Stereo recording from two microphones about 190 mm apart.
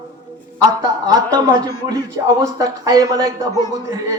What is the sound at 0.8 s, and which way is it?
A man's voice, 20° right (ahead or behind).